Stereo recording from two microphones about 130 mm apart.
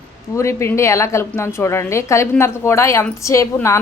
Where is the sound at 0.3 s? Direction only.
20° left (ahead or behind).